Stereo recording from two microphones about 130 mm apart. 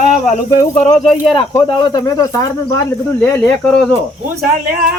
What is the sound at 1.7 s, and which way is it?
Speech, 30° left (ahead or behind).